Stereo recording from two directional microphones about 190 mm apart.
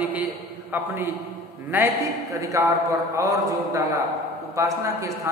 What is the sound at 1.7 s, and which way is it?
A man's voice, 10° right (ahead or behind).